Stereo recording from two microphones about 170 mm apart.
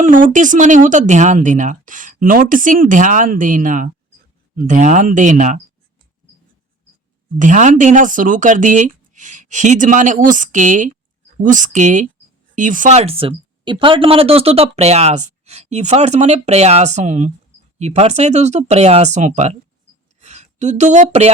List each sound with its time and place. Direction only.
0.0 s speech: 50° right (ahead or behind)
7.3 s speech: 50° right (ahead or behind)
20.1 s a sound: 45° right (ahead or behind)